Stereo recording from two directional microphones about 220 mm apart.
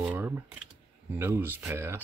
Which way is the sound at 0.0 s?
10° right (ahead or behind).